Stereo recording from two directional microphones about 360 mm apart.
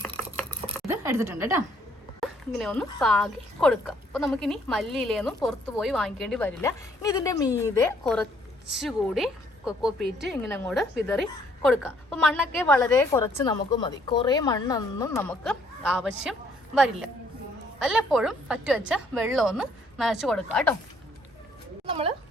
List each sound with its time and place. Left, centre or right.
0.9 s a woman's voice: centre
21.8 s speech: centre